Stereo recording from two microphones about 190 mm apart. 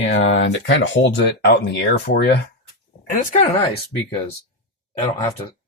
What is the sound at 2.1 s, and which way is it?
Speech, 60° left (ahead or behind).